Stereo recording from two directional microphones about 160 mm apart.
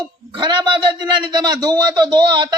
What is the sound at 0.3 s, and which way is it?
A man's voice, 30° right (ahead or behind).